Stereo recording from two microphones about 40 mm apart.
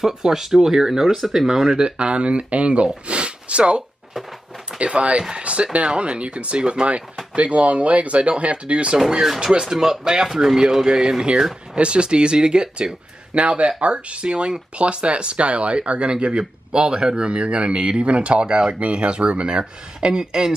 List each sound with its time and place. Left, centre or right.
0.0 s speech: centre
1.8 s speech: right
9.4 s speech: centre
13.3 s speech: right